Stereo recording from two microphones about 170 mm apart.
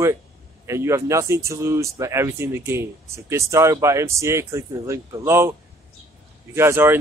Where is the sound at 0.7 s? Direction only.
15° right (ahead or behind).